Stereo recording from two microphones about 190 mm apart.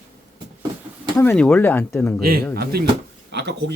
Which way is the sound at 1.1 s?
10° left (ahead or behind).